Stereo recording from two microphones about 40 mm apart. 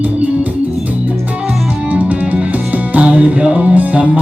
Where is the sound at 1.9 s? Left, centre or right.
Right.